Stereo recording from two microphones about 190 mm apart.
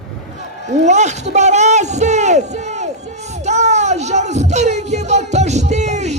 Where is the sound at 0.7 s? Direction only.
35° right (ahead or behind).